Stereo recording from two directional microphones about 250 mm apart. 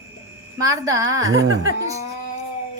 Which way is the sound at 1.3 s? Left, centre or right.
Right.